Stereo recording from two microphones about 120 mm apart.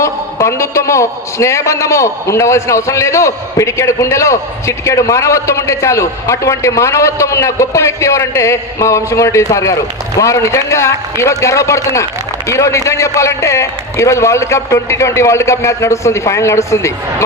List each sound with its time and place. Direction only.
0.0 s a man's voice: 25° left (ahead or behind)